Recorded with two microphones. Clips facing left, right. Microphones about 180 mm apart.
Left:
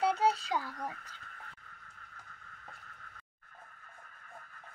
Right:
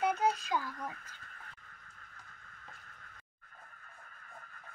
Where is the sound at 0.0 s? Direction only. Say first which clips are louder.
Left 2 dB; 30° left (ahead or behind).